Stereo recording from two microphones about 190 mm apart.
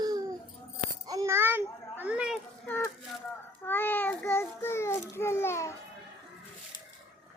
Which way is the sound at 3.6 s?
10° left (ahead or behind).